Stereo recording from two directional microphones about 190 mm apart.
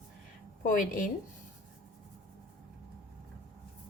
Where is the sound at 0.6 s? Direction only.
45° left (ahead or behind).